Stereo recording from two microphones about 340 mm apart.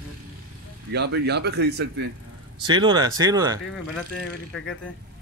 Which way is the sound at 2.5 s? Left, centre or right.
Centre.